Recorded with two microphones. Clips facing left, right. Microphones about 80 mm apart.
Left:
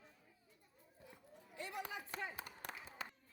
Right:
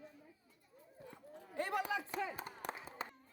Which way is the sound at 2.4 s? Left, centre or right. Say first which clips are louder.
Right 6 dB; right.